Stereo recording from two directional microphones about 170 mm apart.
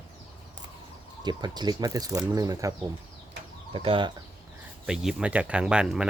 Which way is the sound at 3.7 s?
30° right (ahead or behind).